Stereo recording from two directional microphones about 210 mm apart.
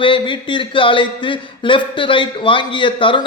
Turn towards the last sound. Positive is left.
turn(degrees=25)  # may be behind; listen again after turning